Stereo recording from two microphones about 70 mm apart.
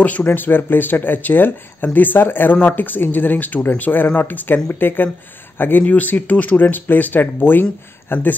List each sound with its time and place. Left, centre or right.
0.0 s speech: left